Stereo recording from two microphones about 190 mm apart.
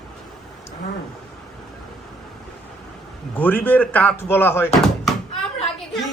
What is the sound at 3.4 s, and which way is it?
Speech, 10° left (ahead or behind).